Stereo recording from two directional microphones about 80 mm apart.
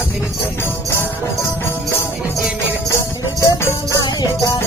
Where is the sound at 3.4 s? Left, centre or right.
Left.